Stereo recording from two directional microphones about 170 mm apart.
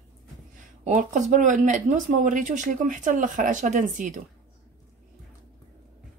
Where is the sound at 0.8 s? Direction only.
45° right (ahead or behind).